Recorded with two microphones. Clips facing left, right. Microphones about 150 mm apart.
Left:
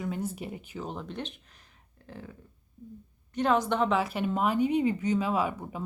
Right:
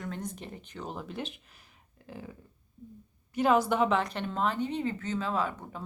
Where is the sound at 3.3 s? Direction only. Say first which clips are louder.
Right 1 dB; 5° right (ahead or behind); by 5.8 s 10° left (ahead or behind).